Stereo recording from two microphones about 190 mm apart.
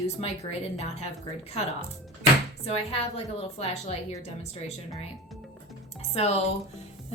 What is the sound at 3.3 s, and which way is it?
Speech, 30° left (ahead or behind).